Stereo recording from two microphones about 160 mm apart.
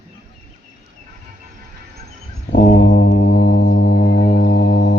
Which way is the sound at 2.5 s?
55° left (ahead or behind).